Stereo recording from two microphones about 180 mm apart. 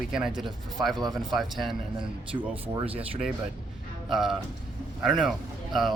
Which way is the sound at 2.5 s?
30° right (ahead or behind).